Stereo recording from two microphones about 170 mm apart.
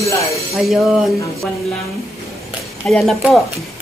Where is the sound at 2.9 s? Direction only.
5° left (ahead or behind).